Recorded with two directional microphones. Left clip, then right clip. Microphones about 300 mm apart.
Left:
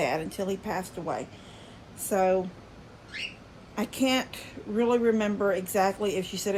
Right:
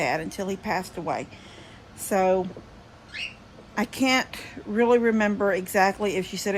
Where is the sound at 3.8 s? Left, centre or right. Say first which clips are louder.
Right 4 dB; centre.